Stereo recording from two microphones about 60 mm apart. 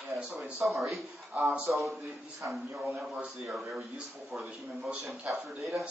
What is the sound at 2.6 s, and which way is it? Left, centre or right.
Speech, right.